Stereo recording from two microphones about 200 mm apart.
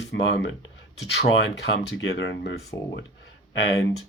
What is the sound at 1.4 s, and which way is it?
Speech, 60° left (ahead or behind).